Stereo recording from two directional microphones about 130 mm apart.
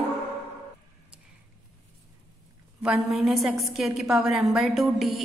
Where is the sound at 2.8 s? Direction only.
Centre (ahead or behind).